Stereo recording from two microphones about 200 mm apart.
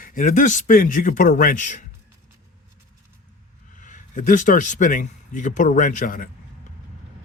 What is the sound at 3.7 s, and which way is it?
Speech, 40° left (ahead or behind).